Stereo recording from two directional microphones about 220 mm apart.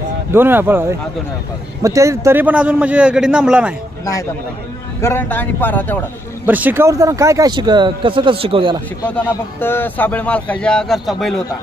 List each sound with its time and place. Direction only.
0.3 s a man's voice: 10° right (ahead or behind)
5.0 s speech: 10° left (ahead or behind)
6.4 s speech: 10° right (ahead or behind); by 8.8 s 25° right (ahead or behind)
9.0 s speech: 10° left (ahead or behind)